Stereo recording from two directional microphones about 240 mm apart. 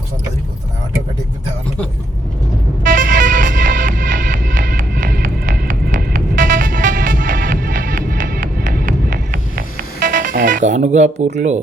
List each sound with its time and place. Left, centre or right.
2.8 s music: right
11.3 s speech: right